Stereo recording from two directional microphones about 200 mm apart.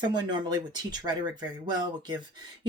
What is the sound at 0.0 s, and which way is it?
Speech, 20° right (ahead or behind).